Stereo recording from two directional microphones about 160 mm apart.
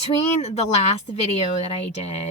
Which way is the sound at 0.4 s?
40° left (ahead or behind).